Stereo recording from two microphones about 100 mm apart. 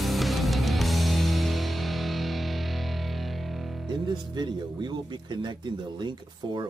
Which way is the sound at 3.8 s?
50° right (ahead or behind).